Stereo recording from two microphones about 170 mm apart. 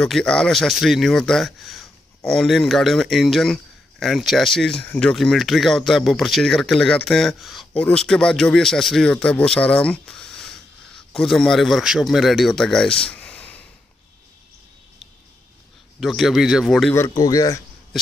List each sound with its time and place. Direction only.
0.0 s speech: 5° left (ahead or behind)
16.0 s speech: centre (ahead or behind)
16.9 s speech: 20° left (ahead or behind)